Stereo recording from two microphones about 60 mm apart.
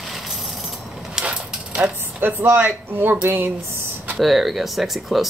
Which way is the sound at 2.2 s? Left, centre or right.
Right.